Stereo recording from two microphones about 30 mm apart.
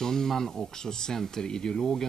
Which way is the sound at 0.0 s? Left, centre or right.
Centre.